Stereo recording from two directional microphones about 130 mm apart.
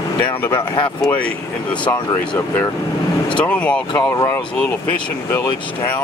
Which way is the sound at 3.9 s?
25° left (ahead or behind).